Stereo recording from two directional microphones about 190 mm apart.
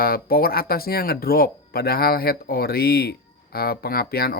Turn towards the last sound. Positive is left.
turn(degrees=55)  # may be behind; listen again after turning